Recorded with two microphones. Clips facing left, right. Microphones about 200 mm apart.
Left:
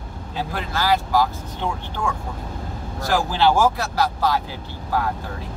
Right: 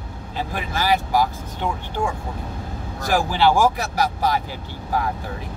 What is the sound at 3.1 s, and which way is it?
Speech, 15° right (ahead or behind).